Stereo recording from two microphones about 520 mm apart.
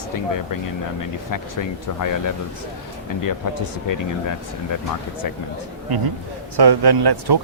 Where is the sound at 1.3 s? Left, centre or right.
Left.